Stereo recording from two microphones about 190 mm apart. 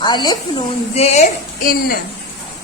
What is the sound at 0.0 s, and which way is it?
Speech, 25° left (ahead or behind).